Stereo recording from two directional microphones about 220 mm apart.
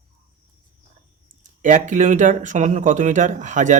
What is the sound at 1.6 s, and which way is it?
Speech, 35° right (ahead or behind).